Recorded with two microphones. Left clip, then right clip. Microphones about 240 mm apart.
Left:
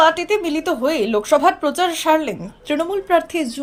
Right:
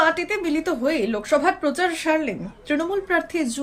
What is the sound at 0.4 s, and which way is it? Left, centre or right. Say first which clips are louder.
Speech: left 3 dB; centre.